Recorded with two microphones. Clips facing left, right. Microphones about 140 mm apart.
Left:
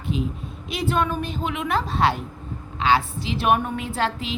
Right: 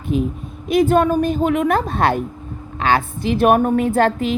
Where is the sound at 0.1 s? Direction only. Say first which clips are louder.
Right 8 dB; 50° right (ahead or behind).